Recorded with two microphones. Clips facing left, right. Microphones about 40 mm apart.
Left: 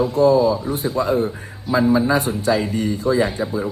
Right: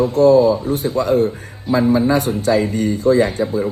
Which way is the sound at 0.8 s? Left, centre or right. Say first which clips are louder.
Right 3 dB; left.